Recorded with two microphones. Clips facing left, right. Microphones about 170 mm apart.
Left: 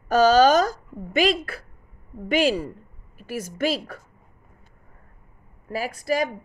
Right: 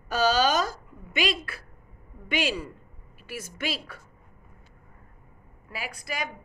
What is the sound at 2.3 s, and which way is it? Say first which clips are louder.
A woman's voice: left 8 dB; 45° left (ahead or behind).